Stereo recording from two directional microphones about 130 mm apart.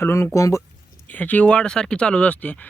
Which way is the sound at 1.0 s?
10° left (ahead or behind).